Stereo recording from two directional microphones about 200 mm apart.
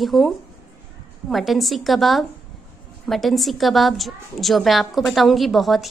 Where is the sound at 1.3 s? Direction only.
Centre (ahead or behind).